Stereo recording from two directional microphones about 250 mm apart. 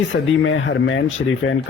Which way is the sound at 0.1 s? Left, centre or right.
Left.